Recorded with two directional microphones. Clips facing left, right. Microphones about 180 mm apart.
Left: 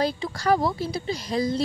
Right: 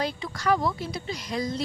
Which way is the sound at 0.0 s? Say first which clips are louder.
Left 4 dB; 35° left (ahead or behind).